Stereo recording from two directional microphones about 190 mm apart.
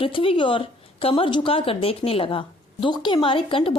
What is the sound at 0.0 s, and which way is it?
Speech, 30° left (ahead or behind).